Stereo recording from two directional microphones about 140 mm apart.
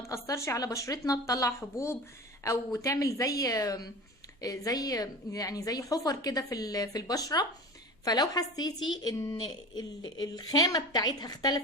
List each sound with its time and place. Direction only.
0.0 s a woman's voice: 20° left (ahead or behind)